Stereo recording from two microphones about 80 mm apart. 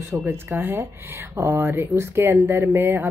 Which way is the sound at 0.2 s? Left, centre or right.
Right.